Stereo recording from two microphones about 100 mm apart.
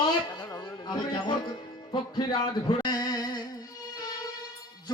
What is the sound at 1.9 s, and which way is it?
Music, 50° left (ahead or behind).